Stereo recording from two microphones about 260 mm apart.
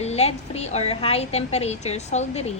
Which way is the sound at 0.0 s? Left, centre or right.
Left.